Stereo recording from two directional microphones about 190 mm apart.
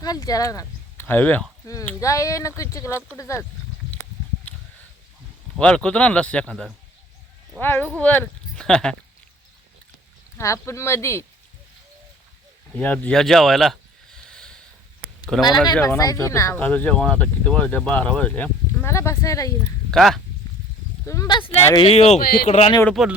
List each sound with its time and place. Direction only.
0.0 s speech: 20° left (ahead or behind)
5.5 s a man's voice: 5° left (ahead or behind)
10.3 s speech: 15° left (ahead or behind)
12.7 s a man's voice: 10° left (ahead or behind)
14.3 s a sound: 5° left (ahead or behind)
15.4 s speech: 20° left (ahead or behind)
19.9 s a man's voice: centre (ahead or behind)
21.0 s speech: 15° left (ahead or behind); by 22.7 s 35° left (ahead or behind)
22.9 s a man's voice: centre (ahead or behind)